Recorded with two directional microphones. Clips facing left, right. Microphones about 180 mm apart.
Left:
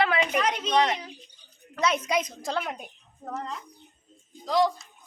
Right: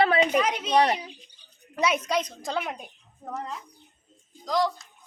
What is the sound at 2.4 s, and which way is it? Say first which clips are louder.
Speech: even; centre (ahead or behind).